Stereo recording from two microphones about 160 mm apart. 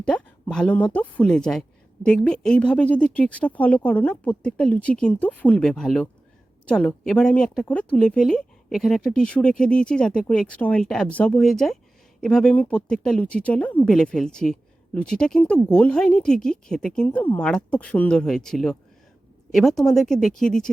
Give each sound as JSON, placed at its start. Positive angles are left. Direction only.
{"t": 0.1, "sound": "speech", "side_deg": 5}